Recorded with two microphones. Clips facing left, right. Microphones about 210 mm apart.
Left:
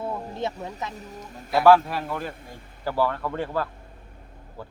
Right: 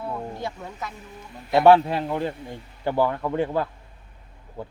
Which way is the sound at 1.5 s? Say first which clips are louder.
Right 2 dB; 25° right (ahead or behind).